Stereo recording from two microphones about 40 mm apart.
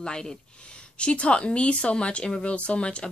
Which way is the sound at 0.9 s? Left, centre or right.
Left.